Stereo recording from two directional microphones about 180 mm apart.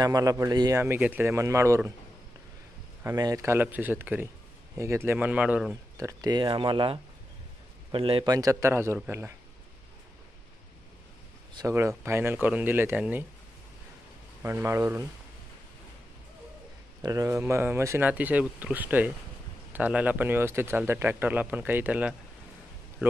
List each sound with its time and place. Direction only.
0.0 s a man's voice: 20° right (ahead or behind)
3.0 s a man's voice: 15° right (ahead or behind)
5.9 s speech: 20° right (ahead or behind)
8.3 s a man's voice: 20° right (ahead or behind)
11.5 s a man's voice: 15° right (ahead or behind)
14.4 s a man's voice: 15° right (ahead or behind)
17.0 s a man's voice: 20° right (ahead or behind)